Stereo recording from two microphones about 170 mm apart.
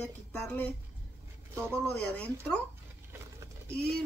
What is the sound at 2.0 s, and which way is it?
Speech, 10° left (ahead or behind).